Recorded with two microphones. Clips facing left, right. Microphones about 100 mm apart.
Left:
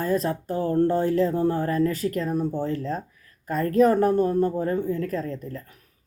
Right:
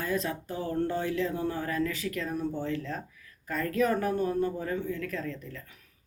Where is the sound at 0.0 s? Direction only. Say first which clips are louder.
Left 7 dB; 40° left (ahead or behind).